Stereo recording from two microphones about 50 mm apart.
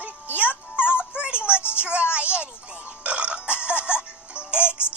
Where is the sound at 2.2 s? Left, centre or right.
Right.